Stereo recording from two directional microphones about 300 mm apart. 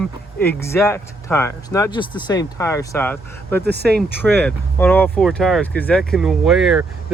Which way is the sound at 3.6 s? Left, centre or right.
Right.